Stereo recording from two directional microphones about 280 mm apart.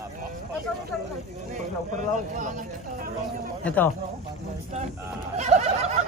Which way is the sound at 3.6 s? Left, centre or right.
Centre.